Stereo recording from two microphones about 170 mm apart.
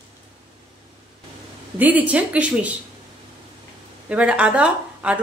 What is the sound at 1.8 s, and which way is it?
Speech, 10° right (ahead or behind).